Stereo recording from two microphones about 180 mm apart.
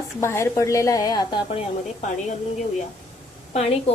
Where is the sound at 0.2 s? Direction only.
15° left (ahead or behind).